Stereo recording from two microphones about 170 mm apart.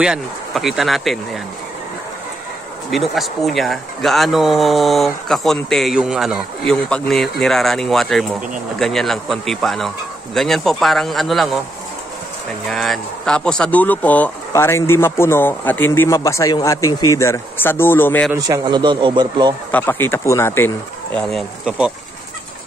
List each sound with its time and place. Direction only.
0.0 s speech: 5° right (ahead or behind)
2.9 s speech: centre (ahead or behind)
12.6 s speech: centre (ahead or behind)
18.7 s a man's voice: 25° right (ahead or behind)
19.7 s speech: 10° left (ahead or behind); by 21.9 s 5° right (ahead or behind)